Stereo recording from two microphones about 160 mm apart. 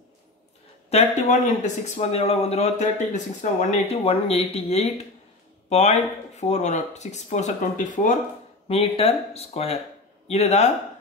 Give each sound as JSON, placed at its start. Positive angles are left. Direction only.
{"t": 0.8, "sound": "speech", "side_deg": 45}
{"t": 8.6, "sound": "speech", "side_deg": 40}